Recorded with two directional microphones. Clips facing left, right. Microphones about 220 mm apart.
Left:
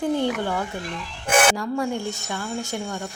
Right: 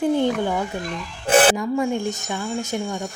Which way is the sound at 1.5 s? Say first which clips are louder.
Right 3 dB; 20° right (ahead or behind).